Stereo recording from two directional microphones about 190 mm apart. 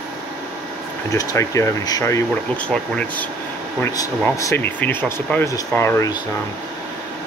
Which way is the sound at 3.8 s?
15° left (ahead or behind).